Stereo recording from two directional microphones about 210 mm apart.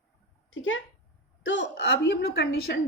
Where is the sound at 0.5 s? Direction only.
65° left (ahead or behind).